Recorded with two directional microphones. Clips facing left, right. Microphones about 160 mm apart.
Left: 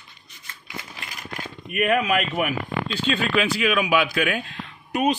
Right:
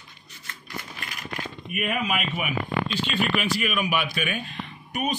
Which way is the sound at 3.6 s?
90° left.